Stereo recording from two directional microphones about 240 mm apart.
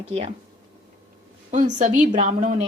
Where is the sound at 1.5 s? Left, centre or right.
Right.